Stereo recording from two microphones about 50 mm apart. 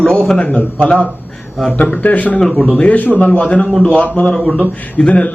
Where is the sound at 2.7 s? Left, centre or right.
Left.